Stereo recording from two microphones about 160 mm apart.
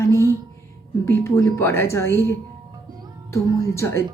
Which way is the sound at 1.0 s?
15° left (ahead or behind).